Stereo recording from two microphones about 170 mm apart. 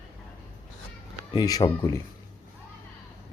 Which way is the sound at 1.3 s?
25° left (ahead or behind).